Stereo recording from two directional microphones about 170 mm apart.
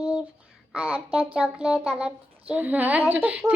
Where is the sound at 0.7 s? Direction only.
5° right (ahead or behind).